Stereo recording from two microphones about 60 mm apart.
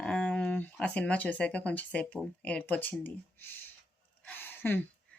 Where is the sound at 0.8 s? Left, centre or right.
Centre.